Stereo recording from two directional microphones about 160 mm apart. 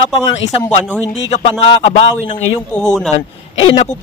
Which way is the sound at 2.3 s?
40° left (ahead or behind).